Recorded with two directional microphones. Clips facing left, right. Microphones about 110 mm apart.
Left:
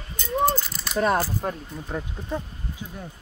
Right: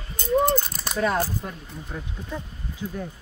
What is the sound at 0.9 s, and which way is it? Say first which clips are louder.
Speech: left 2 dB; 40° left (ahead or behind).